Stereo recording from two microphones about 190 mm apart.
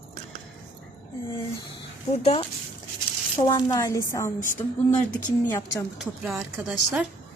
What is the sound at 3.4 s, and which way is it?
A woman's voice, 20° left (ahead or behind).